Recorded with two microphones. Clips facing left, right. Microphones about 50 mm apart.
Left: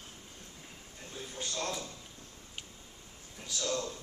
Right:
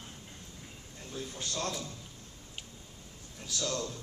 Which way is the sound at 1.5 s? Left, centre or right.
Left.